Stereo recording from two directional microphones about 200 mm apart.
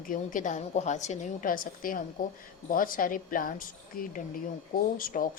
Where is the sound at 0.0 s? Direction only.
40° left (ahead or behind).